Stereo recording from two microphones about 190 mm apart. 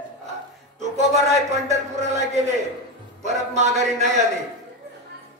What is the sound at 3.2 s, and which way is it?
Speech, 35° right (ahead or behind).